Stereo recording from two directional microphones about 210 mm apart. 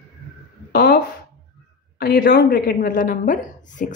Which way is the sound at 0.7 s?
50° left (ahead or behind).